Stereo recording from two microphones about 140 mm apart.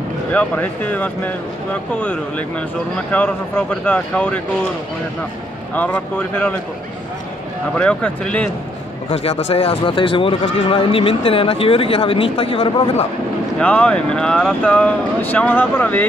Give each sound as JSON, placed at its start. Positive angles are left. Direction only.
{"t": 0.3, "sound": "speech", "side_deg": 10}
{"t": 5.8, "sound": "speech", "side_deg": 10}
{"t": 7.7, "sound": "speech", "side_deg": 10}
{"t": 9.1, "sound": "speech", "side_deg": 50}
{"t": 13.6, "sound": "speech", "side_deg": 10}